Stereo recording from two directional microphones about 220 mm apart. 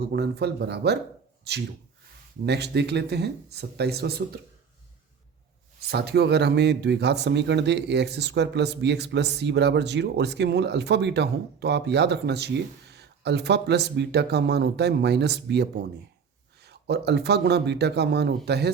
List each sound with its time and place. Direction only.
0.1 s speech: 50° right (ahead or behind)
5.9 s speech: 50° right (ahead or behind)